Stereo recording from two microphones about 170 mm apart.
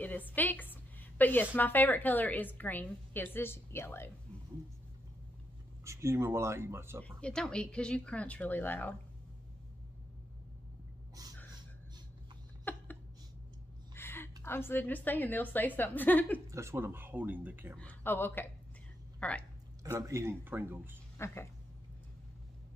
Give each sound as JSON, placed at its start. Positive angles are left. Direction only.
{"t": 0.0, "sound": "a woman's voice", "side_deg": 10}
{"t": 5.9, "sound": "speech", "side_deg": -15}
{"t": 7.0, "sound": "a woman's voice", "side_deg": 5}
{"t": 12.7, "sound": "a sound", "side_deg": 10}
{"t": 13.9, "sound": "a sound", "side_deg": 15}
{"t": 14.4, "sound": "a woman's voice", "side_deg": 15}
{"t": 16.4, "sound": "speech", "side_deg": -15}
{"t": 17.7, "sound": "a woman's voice", "side_deg": 10}
{"t": 19.1, "sound": "a sound", "side_deg": 5}
{"t": 19.8, "sound": "speech", "side_deg": -20}